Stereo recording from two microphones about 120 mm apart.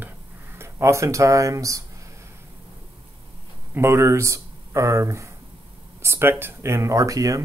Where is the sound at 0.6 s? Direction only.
20° right (ahead or behind).